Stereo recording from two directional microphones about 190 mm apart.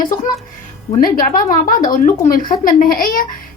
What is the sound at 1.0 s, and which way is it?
A woman's voice, 50° left (ahead or behind).